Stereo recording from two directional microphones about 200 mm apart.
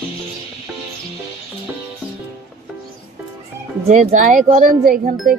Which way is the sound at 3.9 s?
40° right (ahead or behind).